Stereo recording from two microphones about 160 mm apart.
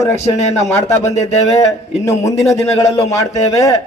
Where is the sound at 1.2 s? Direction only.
45° left (ahead or behind).